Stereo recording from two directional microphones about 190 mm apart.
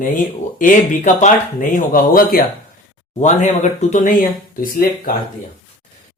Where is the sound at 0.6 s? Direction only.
45° left (ahead or behind).